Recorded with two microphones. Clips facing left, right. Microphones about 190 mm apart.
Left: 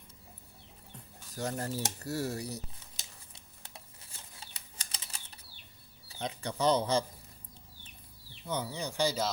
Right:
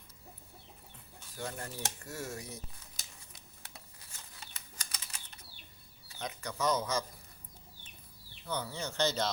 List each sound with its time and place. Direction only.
1.4 s speech: 40° left (ahead or behind)
3.7 s bird flight: 30° left (ahead or behind)
6.1 s speech: 30° left (ahead or behind)
8.4 s speech: 15° left (ahead or behind)